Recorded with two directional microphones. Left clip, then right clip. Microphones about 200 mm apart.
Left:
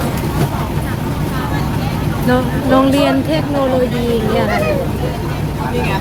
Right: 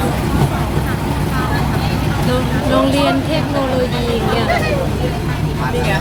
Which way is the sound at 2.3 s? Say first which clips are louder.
Left 4 dB; 35° left (ahead or behind).